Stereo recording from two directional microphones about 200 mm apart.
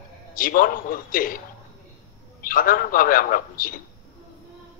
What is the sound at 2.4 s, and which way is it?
A man's voice, 45° left (ahead or behind).